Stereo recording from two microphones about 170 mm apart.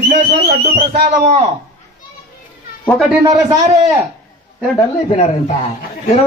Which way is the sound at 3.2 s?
20° right (ahead or behind).